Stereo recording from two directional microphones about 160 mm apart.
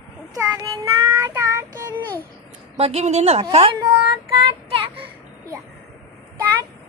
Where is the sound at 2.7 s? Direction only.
40° right (ahead or behind).